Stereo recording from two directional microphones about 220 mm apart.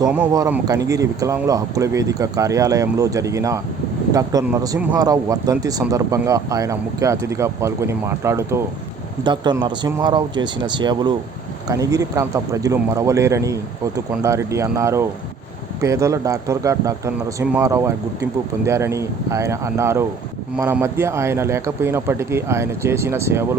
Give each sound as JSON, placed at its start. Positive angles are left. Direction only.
{"t": 0.0, "sound": "speech", "side_deg": -10}